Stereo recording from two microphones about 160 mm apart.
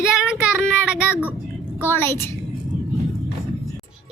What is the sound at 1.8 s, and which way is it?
Speech, 15° left (ahead or behind).